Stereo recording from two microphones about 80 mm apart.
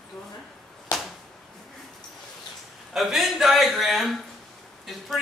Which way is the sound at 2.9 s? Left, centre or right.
Centre.